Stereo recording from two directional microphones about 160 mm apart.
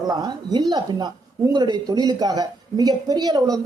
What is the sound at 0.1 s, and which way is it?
Speech, 25° right (ahead or behind).